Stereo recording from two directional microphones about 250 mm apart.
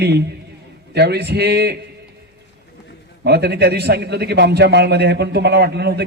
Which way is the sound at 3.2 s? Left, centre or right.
Right.